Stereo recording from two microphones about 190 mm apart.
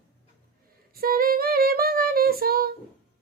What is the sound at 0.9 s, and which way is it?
A woman's voice, 50° right (ahead or behind).